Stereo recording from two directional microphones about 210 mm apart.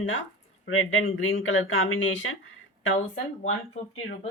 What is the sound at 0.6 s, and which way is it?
Speech, 70° left (ahead or behind).